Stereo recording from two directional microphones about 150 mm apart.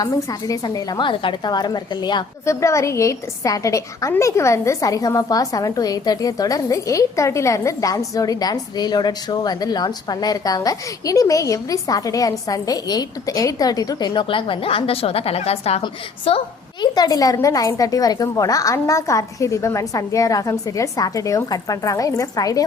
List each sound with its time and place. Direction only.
0.0 s a woman's voice: 25° left (ahead or behind); by 16.4 s 40° left (ahead or behind)
16.8 s a woman's voice: 25° left (ahead or behind)